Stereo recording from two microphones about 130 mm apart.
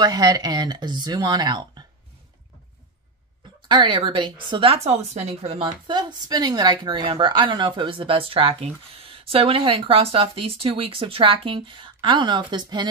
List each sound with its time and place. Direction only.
0.0 s speech: 30° right (ahead or behind)
3.6 s speech: 40° right (ahead or behind)